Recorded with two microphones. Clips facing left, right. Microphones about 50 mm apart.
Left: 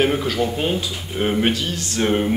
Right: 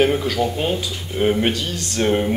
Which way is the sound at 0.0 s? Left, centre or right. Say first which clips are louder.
Right 1 dB; centre.